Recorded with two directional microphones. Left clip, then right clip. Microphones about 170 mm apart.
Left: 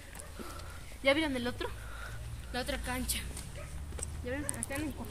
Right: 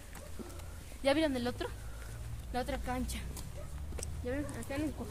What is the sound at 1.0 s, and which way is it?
Speech, 60° right (ahead or behind).